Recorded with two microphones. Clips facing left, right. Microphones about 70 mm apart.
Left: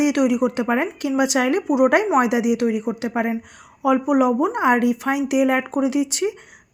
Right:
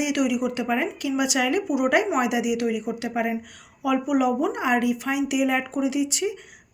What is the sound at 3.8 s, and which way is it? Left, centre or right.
A woman's voice, left.